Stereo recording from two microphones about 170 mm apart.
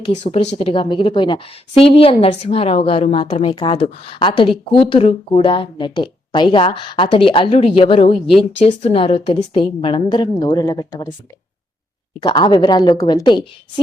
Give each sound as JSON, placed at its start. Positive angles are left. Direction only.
{"t": 0.0, "sound": "a woman's voice", "side_deg": 40}
{"t": 12.2, "sound": "a woman's voice", "side_deg": 30}